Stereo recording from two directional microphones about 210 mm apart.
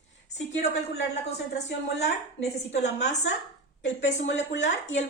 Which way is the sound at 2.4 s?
30° left (ahead or behind).